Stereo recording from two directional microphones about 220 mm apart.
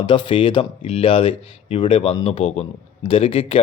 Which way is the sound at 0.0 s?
20° left (ahead or behind).